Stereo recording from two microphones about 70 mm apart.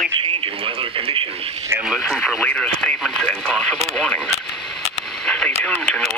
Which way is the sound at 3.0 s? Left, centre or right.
Centre.